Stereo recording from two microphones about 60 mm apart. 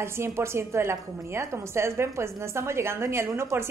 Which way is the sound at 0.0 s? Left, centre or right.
Right.